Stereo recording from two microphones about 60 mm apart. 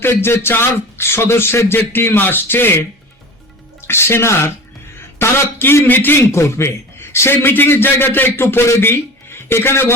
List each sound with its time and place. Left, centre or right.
0.0 s a man's voice: left
6.3 s a man's voice: left